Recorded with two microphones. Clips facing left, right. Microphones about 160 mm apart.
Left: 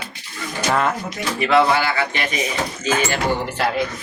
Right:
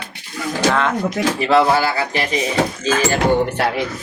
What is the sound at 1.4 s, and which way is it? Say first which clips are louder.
Speech: right 1 dB; 35° right (ahead or behind).